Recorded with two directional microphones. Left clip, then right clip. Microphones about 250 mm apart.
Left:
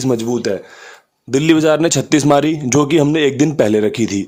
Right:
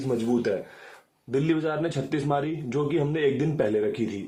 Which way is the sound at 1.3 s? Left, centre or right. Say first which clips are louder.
Left 13 dB; left.